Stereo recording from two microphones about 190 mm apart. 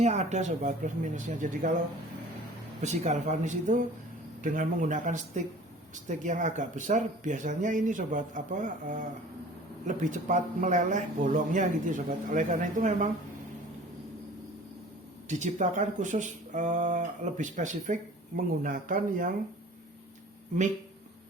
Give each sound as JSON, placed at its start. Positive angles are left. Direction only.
{"t": 0.0, "sound": "speech", "side_deg": -35}
{"t": 2.8, "sound": "speech", "side_deg": -35}
{"t": 15.3, "sound": "speech", "side_deg": -40}